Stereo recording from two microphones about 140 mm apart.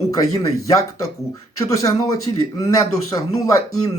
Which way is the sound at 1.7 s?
25° left (ahead or behind).